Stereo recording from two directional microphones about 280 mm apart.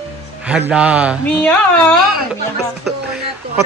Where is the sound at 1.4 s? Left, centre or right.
Centre.